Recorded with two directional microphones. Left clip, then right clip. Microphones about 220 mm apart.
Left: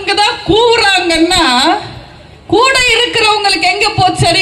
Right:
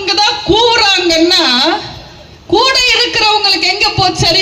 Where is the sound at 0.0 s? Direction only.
20° left (ahead or behind).